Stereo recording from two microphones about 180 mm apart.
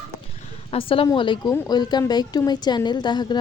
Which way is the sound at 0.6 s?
30° left (ahead or behind).